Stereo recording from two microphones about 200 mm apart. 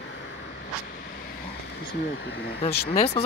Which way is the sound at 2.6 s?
30° left (ahead or behind).